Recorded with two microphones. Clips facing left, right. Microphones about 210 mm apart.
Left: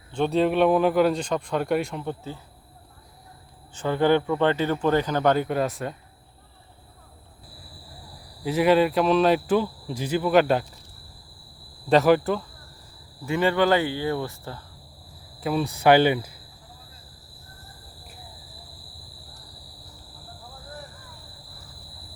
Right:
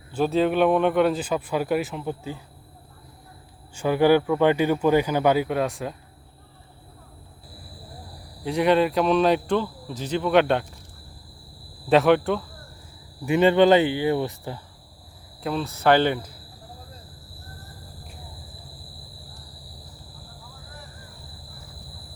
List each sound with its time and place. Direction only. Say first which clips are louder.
0.1 s speech: even; 5° right (ahead or behind)
3.8 s speech: right 3 dB; 10° right (ahead or behind)
8.4 s speech: left 1 dB; 5° left (ahead or behind)
11.9 s speech: even; centre (ahead or behind)
13.2 s speech: right 5 dB; 20° right (ahead or behind)
15.4 s speech: left 2 dB; 5° left (ahead or behind)